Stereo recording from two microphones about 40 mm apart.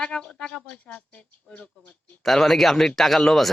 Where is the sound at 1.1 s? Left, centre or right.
Left.